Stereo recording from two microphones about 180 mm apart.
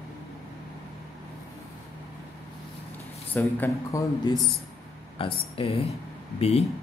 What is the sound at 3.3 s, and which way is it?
Speech, 10° left (ahead or behind).